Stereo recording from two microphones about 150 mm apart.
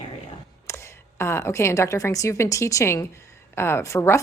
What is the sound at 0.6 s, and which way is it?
A woman's voice, 20° left (ahead or behind).